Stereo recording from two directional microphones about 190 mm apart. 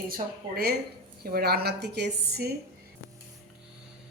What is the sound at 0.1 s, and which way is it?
A woman's voice, 55° right (ahead or behind).